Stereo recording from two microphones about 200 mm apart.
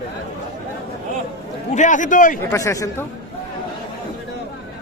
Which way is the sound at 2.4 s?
15° left (ahead or behind).